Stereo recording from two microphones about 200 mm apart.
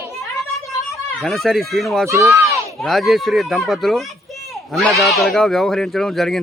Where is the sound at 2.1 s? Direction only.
15° right (ahead or behind).